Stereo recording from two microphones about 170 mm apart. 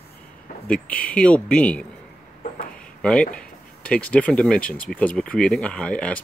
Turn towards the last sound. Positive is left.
turn(degrees=5)  # may be behind; listen again after turning